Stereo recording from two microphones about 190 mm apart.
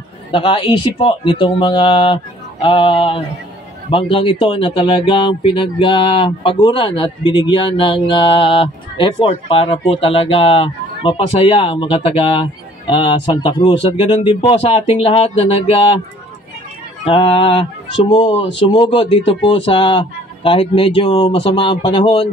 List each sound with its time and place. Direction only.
0.3 s speech: 25° left (ahead or behind)
17.1 s speech: 30° left (ahead or behind)